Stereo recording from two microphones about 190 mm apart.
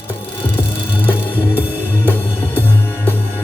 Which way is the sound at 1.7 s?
10° right (ahead or behind).